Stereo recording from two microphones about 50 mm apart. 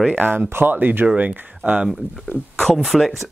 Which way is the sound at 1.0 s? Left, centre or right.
Right.